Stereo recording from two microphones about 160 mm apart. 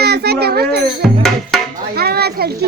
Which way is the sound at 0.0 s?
85° right.